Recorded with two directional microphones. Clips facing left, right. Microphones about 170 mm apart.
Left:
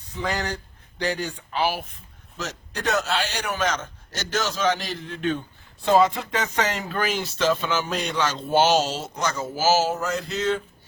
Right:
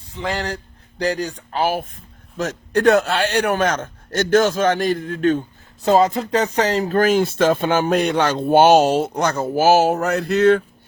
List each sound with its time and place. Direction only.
0.2 s speech: 30° right (ahead or behind); by 10.6 s 60° right (ahead or behind)